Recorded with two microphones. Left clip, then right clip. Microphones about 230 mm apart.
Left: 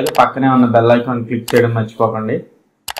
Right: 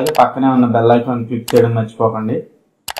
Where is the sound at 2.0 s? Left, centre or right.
Left.